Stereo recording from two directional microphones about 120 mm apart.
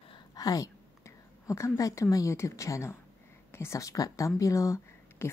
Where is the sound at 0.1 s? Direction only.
35° left (ahead or behind).